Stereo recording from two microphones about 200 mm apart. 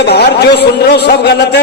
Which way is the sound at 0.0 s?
55° left (ahead or behind).